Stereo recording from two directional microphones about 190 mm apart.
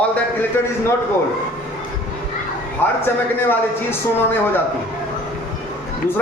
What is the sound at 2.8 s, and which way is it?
A man's voice, 10° left (ahead or behind).